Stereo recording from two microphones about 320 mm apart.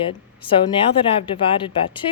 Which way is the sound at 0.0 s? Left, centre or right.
Centre.